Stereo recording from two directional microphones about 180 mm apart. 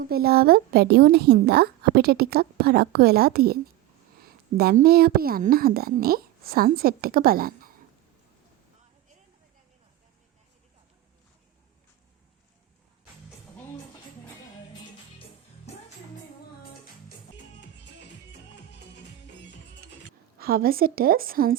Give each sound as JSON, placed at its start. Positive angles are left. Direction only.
{"t": 0.0, "sound": "a woman's voice", "side_deg": -60}
{"t": 17.3, "sound": "music", "side_deg": 75}
{"t": 20.4, "sound": "a woman's voice", "side_deg": -55}